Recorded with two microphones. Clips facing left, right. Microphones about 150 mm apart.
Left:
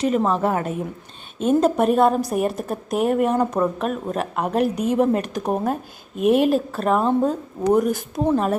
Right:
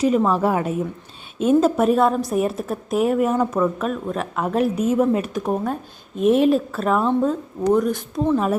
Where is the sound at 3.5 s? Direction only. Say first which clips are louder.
Right 1 dB; 15° left (ahead or behind).